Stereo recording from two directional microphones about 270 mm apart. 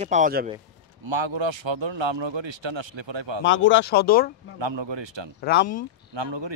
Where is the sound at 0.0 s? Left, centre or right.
Right.